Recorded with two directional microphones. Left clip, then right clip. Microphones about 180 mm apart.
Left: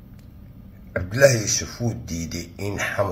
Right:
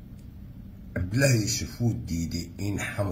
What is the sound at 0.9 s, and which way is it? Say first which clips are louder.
Speech: left 9 dB; 15° right (ahead or behind).